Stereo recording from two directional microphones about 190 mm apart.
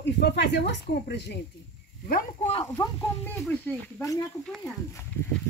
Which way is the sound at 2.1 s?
45° left (ahead or behind).